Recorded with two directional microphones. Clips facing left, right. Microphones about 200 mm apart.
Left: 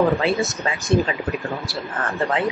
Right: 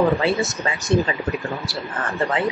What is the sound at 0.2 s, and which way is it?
Speech, centre (ahead or behind).